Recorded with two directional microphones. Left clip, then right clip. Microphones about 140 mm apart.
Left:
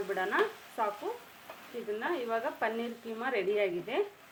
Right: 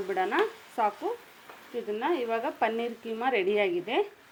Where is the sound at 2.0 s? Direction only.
55° right (ahead or behind).